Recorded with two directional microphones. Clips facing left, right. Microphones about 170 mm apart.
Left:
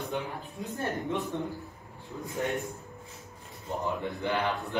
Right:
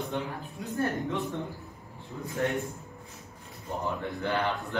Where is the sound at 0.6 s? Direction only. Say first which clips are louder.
Right 3 dB; 20° left (ahead or behind).